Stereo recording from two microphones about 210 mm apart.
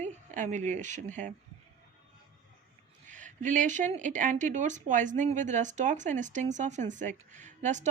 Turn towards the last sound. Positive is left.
turn(degrees=-35)  # may be behind; listen again after turning